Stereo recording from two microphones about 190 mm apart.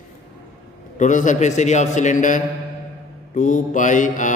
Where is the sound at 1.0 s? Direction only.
40° left (ahead or behind).